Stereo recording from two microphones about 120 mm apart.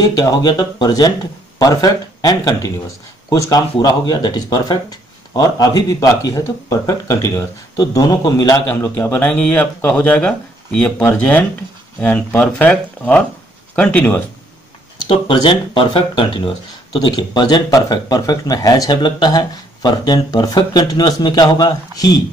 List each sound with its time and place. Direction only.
0.0 s speech: 30° left (ahead or behind)
8.6 s speech: 15° left (ahead or behind)
15.0 s speech: 45° left (ahead or behind)